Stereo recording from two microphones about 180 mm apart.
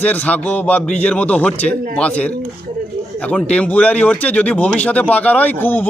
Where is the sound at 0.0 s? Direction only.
10° left (ahead or behind).